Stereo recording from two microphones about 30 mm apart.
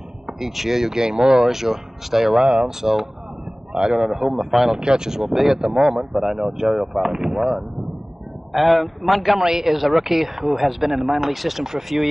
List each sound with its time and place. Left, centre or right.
0.3 s speech: centre
1.5 s speech: centre
2.4 s a man's voice: right
2.8 s a man's voice: centre
4.2 s speech: centre
4.7 s a man's voice: right
5.2 s speech: centre
5.6 s a man's voice: right
6.1 s speech: centre
8.5 s a man's voice: centre
9.4 s speech: centre
9.8 s speech: centre